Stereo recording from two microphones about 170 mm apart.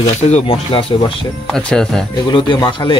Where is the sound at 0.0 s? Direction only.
35° left (ahead or behind).